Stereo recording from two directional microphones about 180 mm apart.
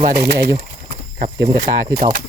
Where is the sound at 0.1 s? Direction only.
60° right (ahead or behind).